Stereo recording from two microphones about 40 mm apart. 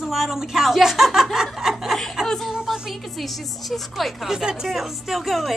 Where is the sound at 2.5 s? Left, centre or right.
Centre.